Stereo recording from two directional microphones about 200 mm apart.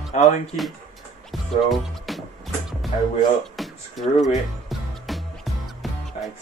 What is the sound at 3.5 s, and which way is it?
Music, centre (ahead or behind).